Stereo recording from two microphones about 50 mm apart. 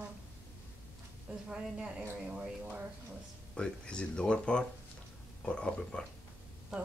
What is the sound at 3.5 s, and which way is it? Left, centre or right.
Speech, centre.